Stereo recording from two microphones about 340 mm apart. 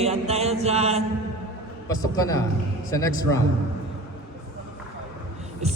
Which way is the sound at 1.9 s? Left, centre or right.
Centre.